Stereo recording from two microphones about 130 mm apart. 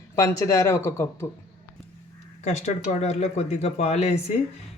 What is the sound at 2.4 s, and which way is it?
Speech, 60° left (ahead or behind).